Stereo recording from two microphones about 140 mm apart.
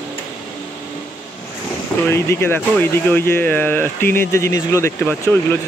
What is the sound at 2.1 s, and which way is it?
Speech, 15° left (ahead or behind).